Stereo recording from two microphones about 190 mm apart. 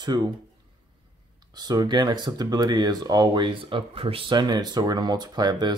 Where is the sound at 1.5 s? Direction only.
20° right (ahead or behind).